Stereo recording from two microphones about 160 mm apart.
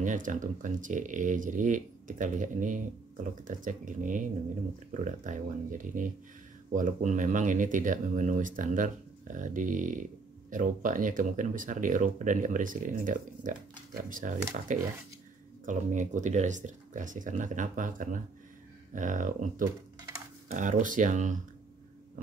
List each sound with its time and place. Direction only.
0.0 s speech: 50° right (ahead or behind)
19.6 s typing: 20° right (ahead or behind)
20.5 s speech: 55° right (ahead or behind)